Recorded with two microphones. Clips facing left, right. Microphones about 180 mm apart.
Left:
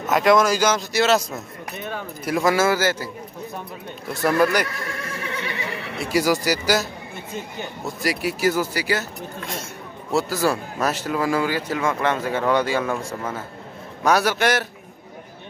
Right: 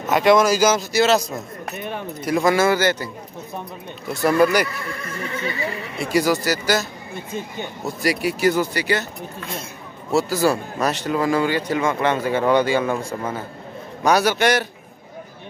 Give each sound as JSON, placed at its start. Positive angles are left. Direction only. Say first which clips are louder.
{"t": 0.1, "sound": "speech", "louder": "right 2 dB", "side_deg": 0}
{"t": 4.1, "sound": "speech", "louder": "right 2 dB", "side_deg": 0}
{"t": 4.8, "sound": "neigh", "louder": "right 1 dB", "side_deg": 70}
{"t": 5.9, "sound": "speech", "louder": "right 1 dB", "side_deg": 5}
{"t": 10.1, "sound": "speech", "louder": "right 3 dB", "side_deg": 0}